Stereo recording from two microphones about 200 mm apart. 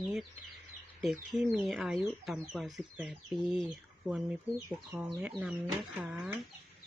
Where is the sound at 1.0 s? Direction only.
Centre (ahead or behind).